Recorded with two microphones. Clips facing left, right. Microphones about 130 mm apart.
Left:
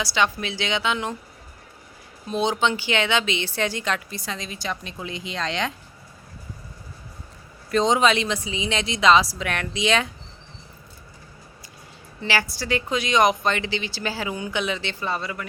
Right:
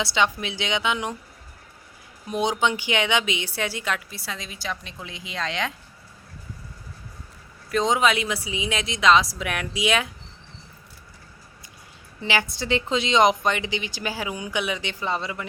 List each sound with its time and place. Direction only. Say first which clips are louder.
0.0 s speech: even; 20° right (ahead or behind)
2.3 s a woman's voice: left 1 dB; 15° right (ahead or behind)
7.7 s a woman's voice: left 2 dB; 5° right (ahead or behind)
12.2 s speech: even; 15° right (ahead or behind)